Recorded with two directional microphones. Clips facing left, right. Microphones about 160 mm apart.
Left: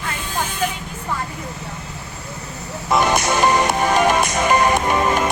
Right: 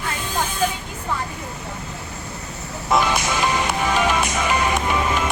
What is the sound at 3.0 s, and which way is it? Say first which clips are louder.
Music: left 4 dB; 45° left (ahead or behind).